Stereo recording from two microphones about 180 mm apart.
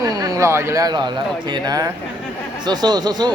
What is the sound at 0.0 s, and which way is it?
Speech, 20° right (ahead or behind).